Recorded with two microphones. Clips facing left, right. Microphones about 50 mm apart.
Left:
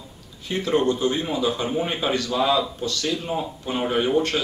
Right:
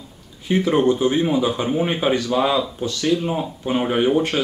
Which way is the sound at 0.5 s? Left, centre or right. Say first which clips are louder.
Right 4 dB; centre.